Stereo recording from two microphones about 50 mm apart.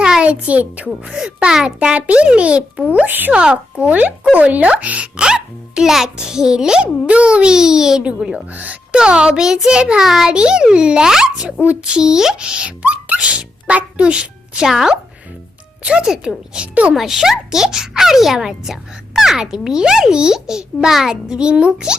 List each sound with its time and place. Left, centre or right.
0.0 s a child's voice: centre
1.5 s speech: centre
3.1 s a child's voice: right
3.3 s speech: right
5.1 s speech: centre
8.5 s speech: right
9.0 s a child's voice: centre
14.7 s speech: centre
15.8 s speech: right
16.0 s speech: centre